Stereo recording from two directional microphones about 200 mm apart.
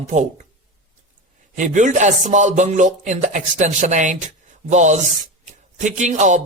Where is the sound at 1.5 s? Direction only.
40° right (ahead or behind).